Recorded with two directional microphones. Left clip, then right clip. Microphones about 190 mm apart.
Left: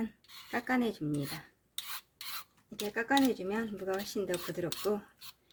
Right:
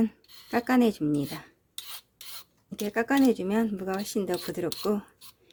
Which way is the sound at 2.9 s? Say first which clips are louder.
Right 5 dB; 55° right (ahead or behind).